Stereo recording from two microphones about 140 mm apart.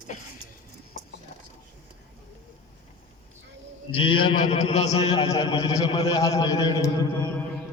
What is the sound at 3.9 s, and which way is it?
Speech, 40° left (ahead or behind).